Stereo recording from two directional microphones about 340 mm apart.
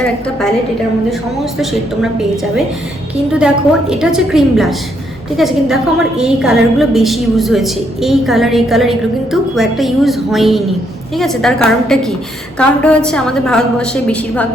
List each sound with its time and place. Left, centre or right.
0.0 s a woman's voice: centre